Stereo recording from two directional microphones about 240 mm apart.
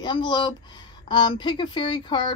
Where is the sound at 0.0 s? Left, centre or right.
Centre.